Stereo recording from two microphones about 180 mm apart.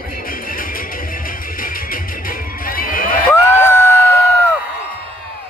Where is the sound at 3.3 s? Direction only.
15° left (ahead or behind).